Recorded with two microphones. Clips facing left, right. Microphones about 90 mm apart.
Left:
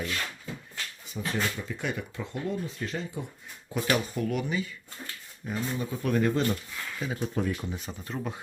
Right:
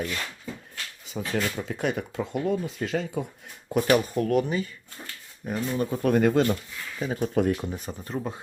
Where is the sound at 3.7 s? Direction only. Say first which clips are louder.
Right 6 dB; 45° right (ahead or behind).